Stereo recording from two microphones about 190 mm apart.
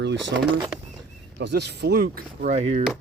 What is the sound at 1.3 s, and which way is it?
Speech, 65° right (ahead or behind).